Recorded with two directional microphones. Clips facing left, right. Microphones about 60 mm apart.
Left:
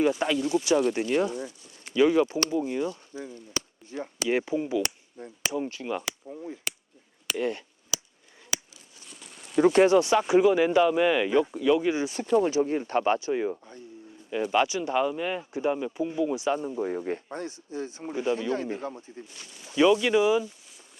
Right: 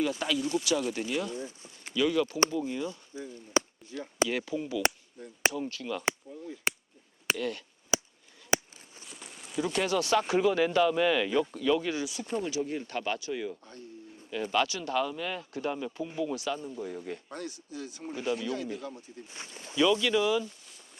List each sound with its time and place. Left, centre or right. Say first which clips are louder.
0.1 s speech: left 5 dB; left
0.3 s speech: left 4 dB; centre
0.6 s speech: left 6 dB; left
6.2 s chop: left 4 dB; left
7.3 s speech: left 10 dB; left
7.9 s a sound: right 6 dB; right
9.0 s a sound: even; centre
9.6 s speech: left 11 dB; left
9.8 s speech: left 7 dB; left
12.0 s speech: left 9 dB; left
19.3 s speech: right 3 dB; right
19.7 s speech: left 5 dB; left